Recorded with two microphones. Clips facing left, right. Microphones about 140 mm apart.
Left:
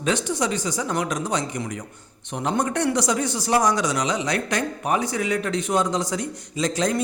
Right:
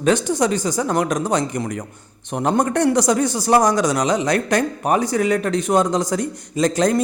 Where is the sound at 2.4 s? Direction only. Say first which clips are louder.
Right 5 dB; 45° right (ahead or behind).